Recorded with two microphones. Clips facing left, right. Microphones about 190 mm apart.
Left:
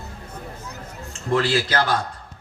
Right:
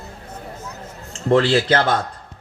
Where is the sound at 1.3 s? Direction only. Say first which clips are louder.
Right 6 dB; 30° right (ahead or behind).